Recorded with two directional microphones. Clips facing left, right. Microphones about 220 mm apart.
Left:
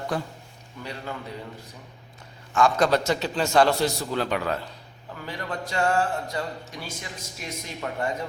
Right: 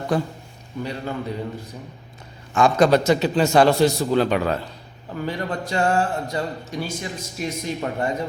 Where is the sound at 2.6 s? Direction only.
20° right (ahead or behind).